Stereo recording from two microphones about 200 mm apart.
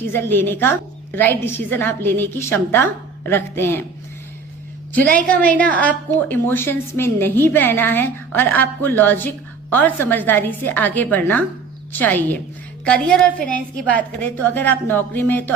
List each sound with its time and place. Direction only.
0.1 s a woman's voice: 10° left (ahead or behind)
4.9 s a woman's voice: 10° left (ahead or behind)